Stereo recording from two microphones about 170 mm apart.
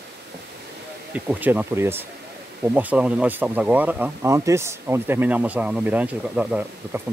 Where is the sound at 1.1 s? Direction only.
10° right (ahead or behind).